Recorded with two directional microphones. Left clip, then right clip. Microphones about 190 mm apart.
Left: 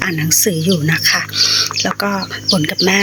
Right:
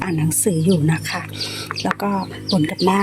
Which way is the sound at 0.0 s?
5° right (ahead or behind).